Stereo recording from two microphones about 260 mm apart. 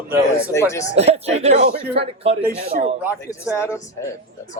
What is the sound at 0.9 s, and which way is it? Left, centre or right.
Speech, right.